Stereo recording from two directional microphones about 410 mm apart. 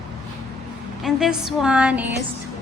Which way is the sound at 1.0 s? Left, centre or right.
Centre.